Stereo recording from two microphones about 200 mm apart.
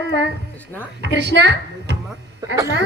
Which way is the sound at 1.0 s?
60° right (ahead or behind).